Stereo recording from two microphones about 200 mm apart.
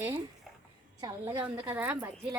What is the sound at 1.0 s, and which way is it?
A woman's voice, 10° right (ahead or behind).